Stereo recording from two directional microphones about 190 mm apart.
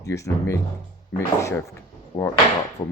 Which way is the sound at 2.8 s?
25° left (ahead or behind).